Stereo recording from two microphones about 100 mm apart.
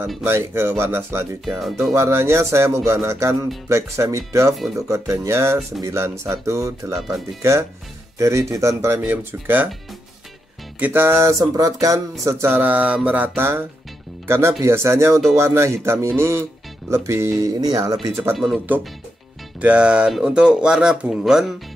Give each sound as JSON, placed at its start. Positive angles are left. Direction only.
{"t": 0.2, "sound": "speech", "side_deg": -25}
{"t": 1.6, "sound": "speech", "side_deg": 0}
{"t": 2.0, "sound": "speech", "side_deg": -25}
{"t": 3.6, "sound": "a sound", "side_deg": -30}
{"t": 7.0, "sound": "speech", "side_deg": 0}
{"t": 8.2, "sound": "speech", "side_deg": -30}
{"t": 10.8, "sound": "speech", "side_deg": -20}
{"t": 11.1, "sound": "a sound", "side_deg": -35}
{"t": 12.4, "sound": "speech", "side_deg": -20}
{"t": 16.9, "sound": "a sound", "side_deg": -30}
{"t": 18.3, "sound": "speech", "side_deg": 0}
{"t": 19.6, "sound": "speech", "side_deg": -10}